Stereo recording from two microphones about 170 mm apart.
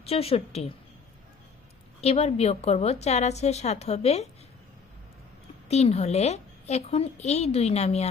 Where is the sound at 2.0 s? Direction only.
35° left (ahead or behind).